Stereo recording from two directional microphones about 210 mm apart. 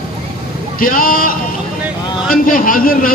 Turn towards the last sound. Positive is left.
turn(degrees=40)  # may be behind; listen again after turning